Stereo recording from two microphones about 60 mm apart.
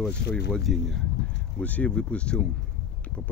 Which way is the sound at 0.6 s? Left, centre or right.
Centre.